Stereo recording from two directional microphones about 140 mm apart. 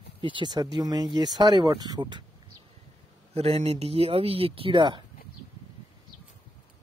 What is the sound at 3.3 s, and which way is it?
Speech, 45° right (ahead or behind).